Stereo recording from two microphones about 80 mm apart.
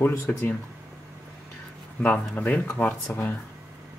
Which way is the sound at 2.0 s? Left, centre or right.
Left.